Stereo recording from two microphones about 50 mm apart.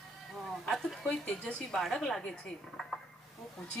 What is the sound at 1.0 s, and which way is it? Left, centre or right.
Speech, left.